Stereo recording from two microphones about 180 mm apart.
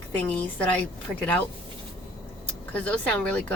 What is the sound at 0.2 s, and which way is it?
Speech, 10° left (ahead or behind).